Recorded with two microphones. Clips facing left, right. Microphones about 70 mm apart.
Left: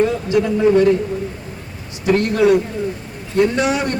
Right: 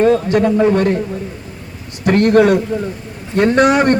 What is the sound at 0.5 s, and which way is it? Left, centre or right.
Speech, right.